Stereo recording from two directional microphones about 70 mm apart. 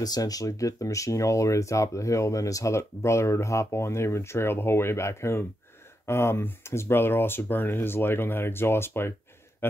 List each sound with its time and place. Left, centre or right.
0.0 s a man's voice: left